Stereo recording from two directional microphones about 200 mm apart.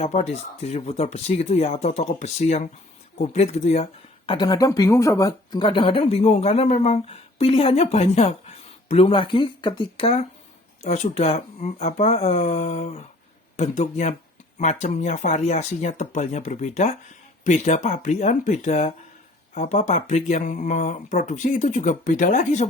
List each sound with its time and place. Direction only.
0.0 s speech: 30° left (ahead or behind)
4.3 s speech: 20° left (ahead or behind); by 22.6 s 40° left (ahead or behind)